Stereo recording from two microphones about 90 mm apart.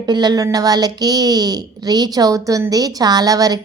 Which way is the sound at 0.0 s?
50° right (ahead or behind).